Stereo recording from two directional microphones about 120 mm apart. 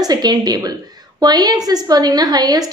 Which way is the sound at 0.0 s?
35° right (ahead or behind).